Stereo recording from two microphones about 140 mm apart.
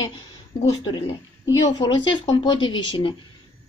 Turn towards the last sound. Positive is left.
turn(degrees=35)  # may be behind; listen again after turning